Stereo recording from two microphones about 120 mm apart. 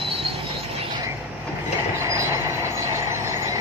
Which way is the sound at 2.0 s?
25° right (ahead or behind).